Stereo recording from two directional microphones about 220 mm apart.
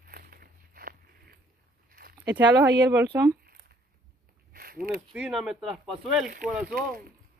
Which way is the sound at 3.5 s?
45° right (ahead or behind).